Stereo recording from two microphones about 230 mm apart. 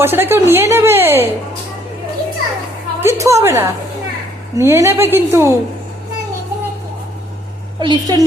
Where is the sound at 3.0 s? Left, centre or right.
Centre.